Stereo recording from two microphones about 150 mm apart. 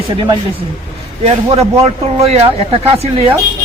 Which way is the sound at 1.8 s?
45° right (ahead or behind).